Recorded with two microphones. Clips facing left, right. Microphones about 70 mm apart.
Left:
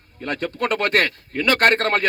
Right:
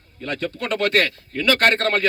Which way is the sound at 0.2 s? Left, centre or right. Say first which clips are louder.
Left 3 dB; left.